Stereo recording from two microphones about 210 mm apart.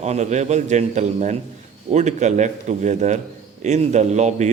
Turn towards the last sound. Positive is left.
turn(degrees=-35)  # may be behind; listen again after turning